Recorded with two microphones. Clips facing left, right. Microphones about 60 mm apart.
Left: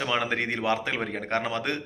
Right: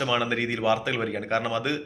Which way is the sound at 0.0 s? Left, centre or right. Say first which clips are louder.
Right 2 dB; left.